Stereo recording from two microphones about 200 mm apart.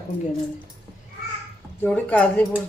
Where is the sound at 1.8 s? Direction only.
5° left (ahead or behind).